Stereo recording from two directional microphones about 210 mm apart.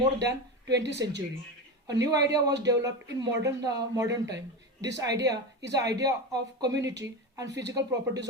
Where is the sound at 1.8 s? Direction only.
15° right (ahead or behind).